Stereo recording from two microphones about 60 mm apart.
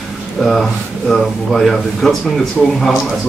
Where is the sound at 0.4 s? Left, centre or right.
Centre.